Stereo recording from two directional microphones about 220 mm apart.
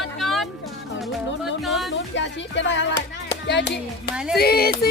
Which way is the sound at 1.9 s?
55° left (ahead or behind).